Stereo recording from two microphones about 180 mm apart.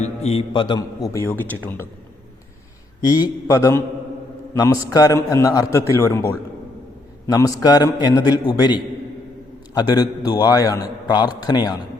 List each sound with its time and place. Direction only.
0.0 s a man's voice: 35° left (ahead or behind); by 1.9 s 10° left (ahead or behind)
3.0 s a man's voice: 20° left (ahead or behind)